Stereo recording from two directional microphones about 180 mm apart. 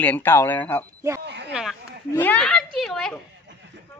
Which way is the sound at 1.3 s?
70° right (ahead or behind).